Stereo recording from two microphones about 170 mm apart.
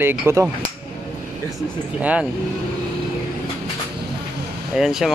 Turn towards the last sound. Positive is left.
turn(degrees=0)  # may be behind; listen again after turning